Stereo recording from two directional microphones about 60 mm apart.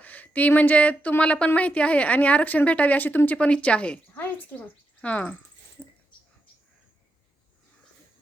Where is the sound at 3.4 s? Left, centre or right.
Centre.